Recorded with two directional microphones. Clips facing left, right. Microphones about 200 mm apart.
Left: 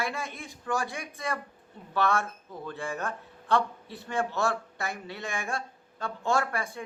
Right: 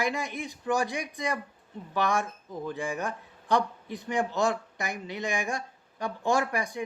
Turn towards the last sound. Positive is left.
turn(degrees=-15)  # may be behind; listen again after turning